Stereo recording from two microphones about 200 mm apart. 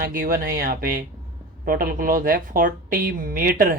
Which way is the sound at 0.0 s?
45° right (ahead or behind).